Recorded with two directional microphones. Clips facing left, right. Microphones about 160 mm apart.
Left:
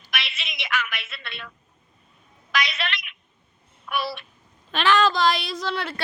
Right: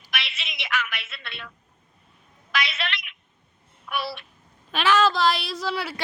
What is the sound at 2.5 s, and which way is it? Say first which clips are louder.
Telephone: left 2 dB; 45° left (ahead or behind).